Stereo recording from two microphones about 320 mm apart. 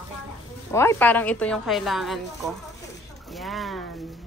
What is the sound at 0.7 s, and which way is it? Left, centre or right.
A woman's voice, centre.